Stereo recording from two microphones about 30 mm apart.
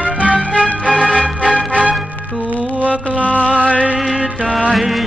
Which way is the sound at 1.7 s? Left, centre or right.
Right.